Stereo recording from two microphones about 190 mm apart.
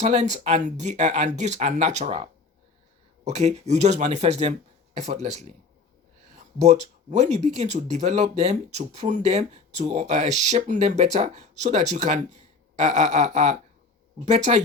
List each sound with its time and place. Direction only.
0.0 s speech: 35° right (ahead or behind)